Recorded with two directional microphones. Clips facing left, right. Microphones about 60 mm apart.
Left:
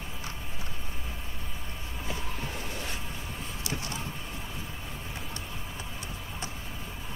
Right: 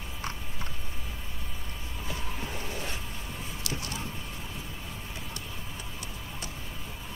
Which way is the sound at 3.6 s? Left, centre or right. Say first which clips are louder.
Left 1 dB; left.